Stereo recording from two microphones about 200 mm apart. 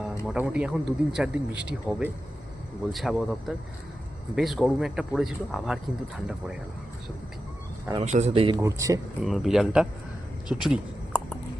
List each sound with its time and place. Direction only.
0.3 s a man's voice: 5° right (ahead or behind)
7.9 s speech: 35° right (ahead or behind)
8.5 s speech: 15° right (ahead or behind)
9.2 s a man's voice: centre (ahead or behind)
10.5 s a sound: centre (ahead or behind)